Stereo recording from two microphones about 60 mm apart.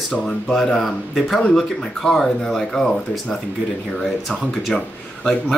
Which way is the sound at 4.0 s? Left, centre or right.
Centre.